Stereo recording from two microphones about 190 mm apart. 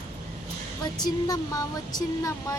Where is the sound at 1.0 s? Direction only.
20° left (ahead or behind).